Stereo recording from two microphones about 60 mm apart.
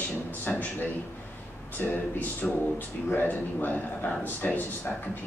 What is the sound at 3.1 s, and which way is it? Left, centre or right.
A man's voice, left.